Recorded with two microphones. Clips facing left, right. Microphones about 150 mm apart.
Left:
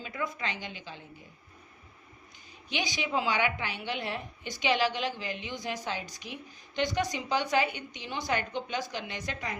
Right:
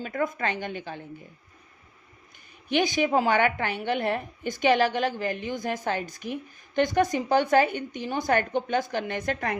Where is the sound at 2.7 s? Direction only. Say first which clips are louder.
Right 9 dB; 55° right (ahead or behind).